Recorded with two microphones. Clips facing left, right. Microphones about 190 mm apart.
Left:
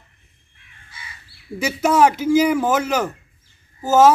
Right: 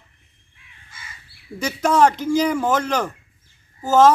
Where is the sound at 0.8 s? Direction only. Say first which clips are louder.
Left 1 dB; 50° right (ahead or behind).